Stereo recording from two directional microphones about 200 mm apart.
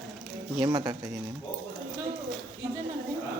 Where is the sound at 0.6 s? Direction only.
20° right (ahead or behind).